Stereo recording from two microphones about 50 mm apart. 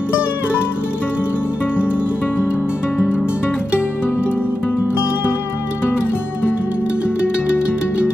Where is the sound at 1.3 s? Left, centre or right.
Left.